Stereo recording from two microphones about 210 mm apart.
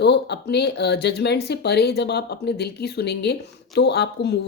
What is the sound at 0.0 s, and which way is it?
Speech, 55° left (ahead or behind).